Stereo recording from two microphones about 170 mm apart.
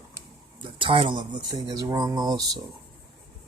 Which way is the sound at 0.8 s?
30° right (ahead or behind).